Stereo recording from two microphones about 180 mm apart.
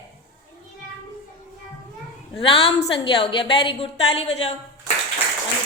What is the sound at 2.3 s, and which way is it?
A woman's voice, 30° left (ahead or behind).